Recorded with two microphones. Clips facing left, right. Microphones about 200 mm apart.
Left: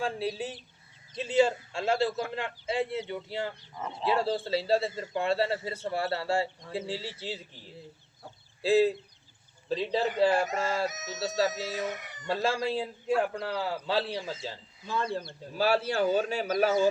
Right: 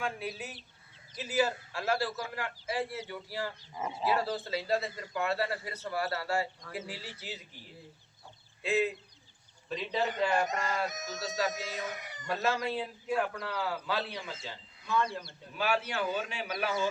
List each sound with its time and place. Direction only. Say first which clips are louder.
0.0 s a man's voice: left 5 dB; 30° left (ahead or behind)
3.8 s speech: right 3 dB; 5° right (ahead or behind)
4.0 s a man's voice: left 4 dB; 25° left (ahead or behind)
8.6 s speech: left 7 dB; 35° left (ahead or behind)
10.8 s speech: left 4 dB; centre (ahead or behind)
12.3 s a man's voice: left 3 dB; 30° left (ahead or behind)